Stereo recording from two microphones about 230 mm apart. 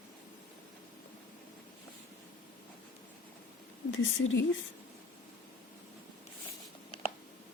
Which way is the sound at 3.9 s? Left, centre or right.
Left.